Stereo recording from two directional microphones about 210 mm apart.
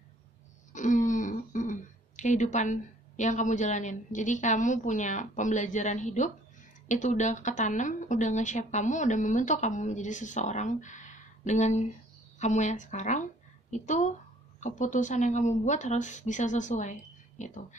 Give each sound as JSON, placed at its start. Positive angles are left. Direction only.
{"t": 0.7, "sound": "a woman's voice", "side_deg": 35}